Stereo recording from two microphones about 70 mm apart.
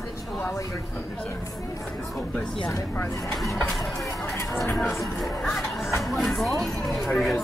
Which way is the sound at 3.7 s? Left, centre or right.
Centre.